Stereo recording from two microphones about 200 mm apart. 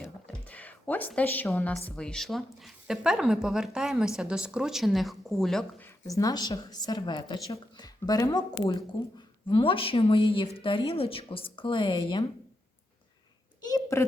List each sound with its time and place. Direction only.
0.0 s a sound: 10° left (ahead or behind)
2.0 s speech: 5° left (ahead or behind)
6.1 s a woman's voice: 15° left (ahead or behind)
13.6 s a child's voice: 20° left (ahead or behind)